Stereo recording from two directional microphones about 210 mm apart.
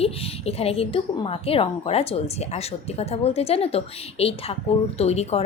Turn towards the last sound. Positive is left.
turn(degrees=30)  # may be behind; listen again after turning